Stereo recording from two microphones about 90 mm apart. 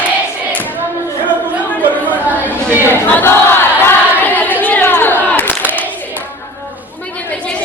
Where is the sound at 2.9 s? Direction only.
25° left (ahead or behind).